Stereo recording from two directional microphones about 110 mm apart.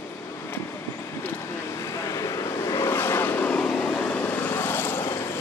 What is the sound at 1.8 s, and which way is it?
Vehicle, 25° left (ahead or behind).